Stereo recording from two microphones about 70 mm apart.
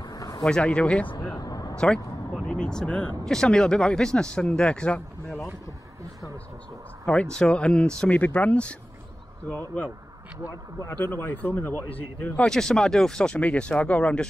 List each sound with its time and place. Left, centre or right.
0.0 s a sound: left
0.4 s speech: centre
1.3 s a sound: left
2.4 s speech: centre
7.1 s speech: centre
10.9 s speech: left
12.4 s speech: centre